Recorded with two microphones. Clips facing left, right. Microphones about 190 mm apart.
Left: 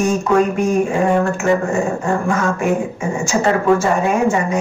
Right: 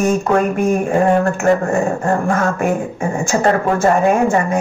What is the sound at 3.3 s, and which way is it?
A woman's voice, 55° right (ahead or behind).